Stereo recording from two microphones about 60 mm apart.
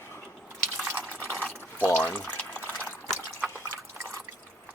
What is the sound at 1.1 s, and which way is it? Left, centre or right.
Fill, left.